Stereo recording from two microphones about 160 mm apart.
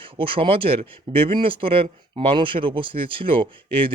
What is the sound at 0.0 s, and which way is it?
Speech, 35° right (ahead or behind).